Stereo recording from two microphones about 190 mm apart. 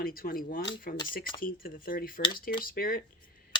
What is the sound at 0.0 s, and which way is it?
Speech, 50° left (ahead or behind).